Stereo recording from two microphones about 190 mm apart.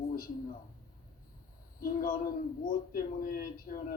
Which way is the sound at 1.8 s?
50° left (ahead or behind).